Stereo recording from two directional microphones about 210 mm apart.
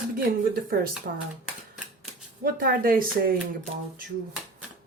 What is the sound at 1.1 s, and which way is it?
Speech, 45° right (ahead or behind).